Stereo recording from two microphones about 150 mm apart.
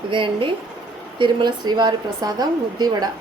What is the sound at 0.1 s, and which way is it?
A woman's voice, 35° right (ahead or behind).